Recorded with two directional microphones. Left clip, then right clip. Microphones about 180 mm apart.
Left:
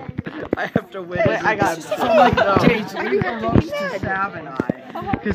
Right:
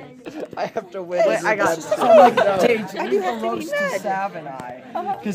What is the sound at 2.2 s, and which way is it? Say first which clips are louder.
Speech: left 2 dB; 25° right (ahead or behind).